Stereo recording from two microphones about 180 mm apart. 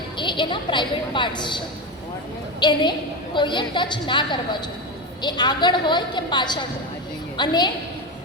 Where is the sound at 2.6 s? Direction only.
25° left (ahead or behind).